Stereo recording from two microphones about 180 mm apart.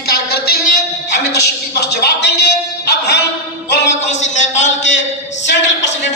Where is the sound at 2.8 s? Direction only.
70° left (ahead or behind).